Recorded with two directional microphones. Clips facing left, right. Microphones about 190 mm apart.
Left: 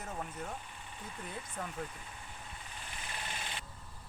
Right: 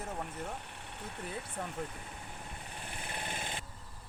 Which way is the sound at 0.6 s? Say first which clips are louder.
Right 3 dB; 70° right (ahead or behind).